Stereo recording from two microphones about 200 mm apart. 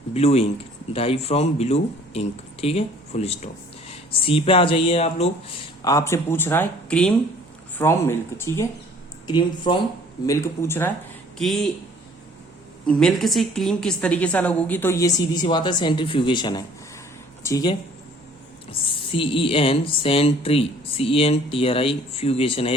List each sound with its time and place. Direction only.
0.1 s speech: 30° left (ahead or behind)
5.8 s a woman's voice: 15° left (ahead or behind)
11.3 s speech: centre (ahead or behind)
12.8 s a woman's voice: 5° left (ahead or behind); by 22.7 s 30° left (ahead or behind)